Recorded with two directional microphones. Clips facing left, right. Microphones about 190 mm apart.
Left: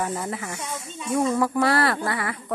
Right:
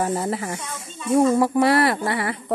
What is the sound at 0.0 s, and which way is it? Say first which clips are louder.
Speech: right 5 dB; 35° right (ahead or behind).